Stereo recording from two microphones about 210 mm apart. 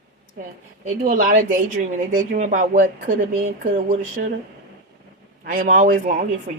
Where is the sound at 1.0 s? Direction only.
40° right (ahead or behind).